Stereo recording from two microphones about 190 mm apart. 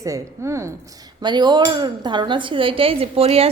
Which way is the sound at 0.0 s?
15° right (ahead or behind).